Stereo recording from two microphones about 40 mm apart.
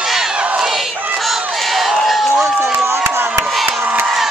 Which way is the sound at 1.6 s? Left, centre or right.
Centre.